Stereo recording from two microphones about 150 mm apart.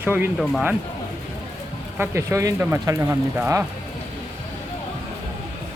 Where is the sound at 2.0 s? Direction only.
20° right (ahead or behind).